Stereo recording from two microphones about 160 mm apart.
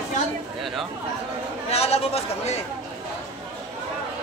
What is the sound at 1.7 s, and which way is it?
Chatter, 40° left (ahead or behind).